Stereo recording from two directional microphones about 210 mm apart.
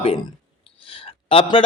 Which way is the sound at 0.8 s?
25° left (ahead or behind).